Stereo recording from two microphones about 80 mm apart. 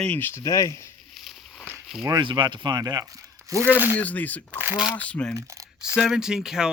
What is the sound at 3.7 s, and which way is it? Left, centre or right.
Speech, right.